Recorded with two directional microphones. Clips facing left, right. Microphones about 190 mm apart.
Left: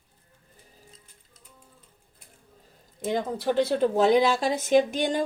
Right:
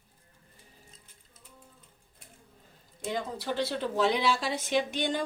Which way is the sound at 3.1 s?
50° left (ahead or behind).